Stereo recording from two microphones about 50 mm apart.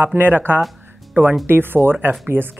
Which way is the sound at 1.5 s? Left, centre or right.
Right.